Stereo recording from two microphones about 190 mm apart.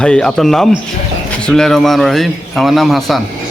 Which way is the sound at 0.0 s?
5° left (ahead or behind).